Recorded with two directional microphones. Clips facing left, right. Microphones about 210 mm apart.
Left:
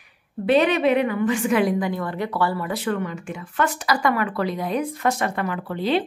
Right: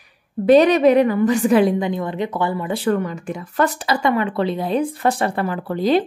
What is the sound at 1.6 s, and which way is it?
Speech, 25° right (ahead or behind).